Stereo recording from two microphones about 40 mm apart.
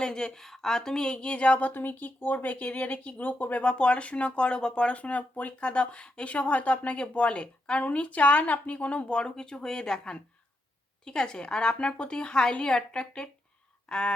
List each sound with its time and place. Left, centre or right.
0.0 s a woman's voice: centre; by 1.7 s left
1.7 s speech: left
3.7 s a woman's voice: left
5.5 s speech: left
9.0 s a woman's voice: left
13.8 s a sound: left